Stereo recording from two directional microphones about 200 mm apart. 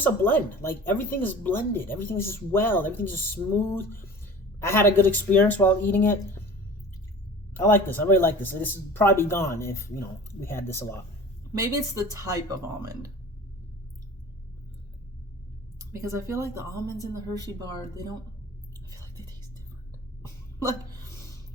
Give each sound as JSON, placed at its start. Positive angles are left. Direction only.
{"t": 0.0, "sound": "speech", "side_deg": 10}
{"t": 7.5, "sound": "speech", "side_deg": 10}
{"t": 12.1, "sound": "speech", "side_deg": -15}
{"t": 15.8, "sound": "speech", "side_deg": -15}